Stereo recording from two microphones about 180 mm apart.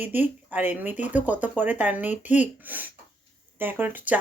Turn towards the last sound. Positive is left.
turn(degrees=-10)  # may be behind; listen again after turning